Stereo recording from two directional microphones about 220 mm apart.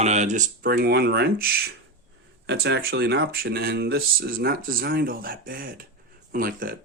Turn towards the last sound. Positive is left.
turn(degrees=-40)  # may be behind; listen again after turning